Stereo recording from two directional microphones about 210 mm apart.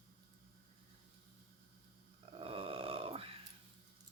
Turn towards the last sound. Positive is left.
turn(degrees=-25)  # may be behind; listen again after turning